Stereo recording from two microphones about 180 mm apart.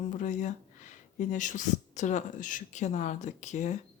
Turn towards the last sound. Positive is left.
turn(degrees=40)  # may be behind; listen again after turning